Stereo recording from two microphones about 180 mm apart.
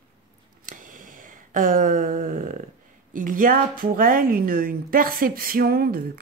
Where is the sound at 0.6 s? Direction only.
45° right (ahead or behind).